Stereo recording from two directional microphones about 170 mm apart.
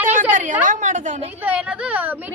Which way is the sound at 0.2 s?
50° right (ahead or behind).